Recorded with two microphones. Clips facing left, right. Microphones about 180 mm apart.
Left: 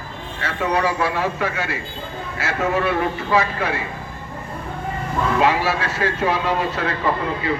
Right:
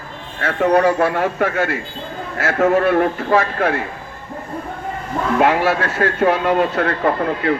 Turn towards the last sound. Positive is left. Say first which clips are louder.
# right 4 dB
turn(degrees=-55)  # may be behind; listen again after turning